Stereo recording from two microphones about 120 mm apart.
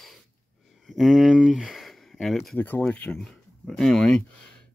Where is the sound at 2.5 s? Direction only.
15° left (ahead or behind).